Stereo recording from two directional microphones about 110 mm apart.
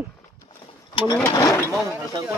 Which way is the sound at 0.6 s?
45° left (ahead or behind).